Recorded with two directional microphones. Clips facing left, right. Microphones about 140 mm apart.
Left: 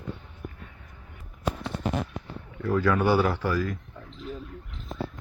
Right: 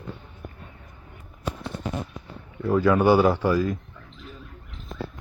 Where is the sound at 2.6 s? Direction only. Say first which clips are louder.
Right 4 dB; 20° right (ahead or behind).